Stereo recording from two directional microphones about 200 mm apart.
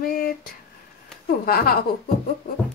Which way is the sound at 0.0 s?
45° left (ahead or behind).